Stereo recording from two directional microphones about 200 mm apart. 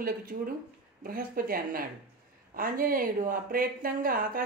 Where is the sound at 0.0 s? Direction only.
45° right (ahead or behind).